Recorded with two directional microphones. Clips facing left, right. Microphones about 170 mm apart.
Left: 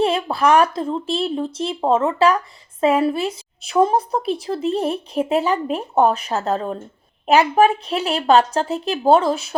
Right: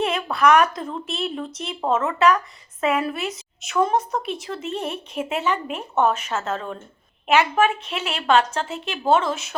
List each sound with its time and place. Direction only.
0.0 s a woman's voice: 30° left (ahead or behind)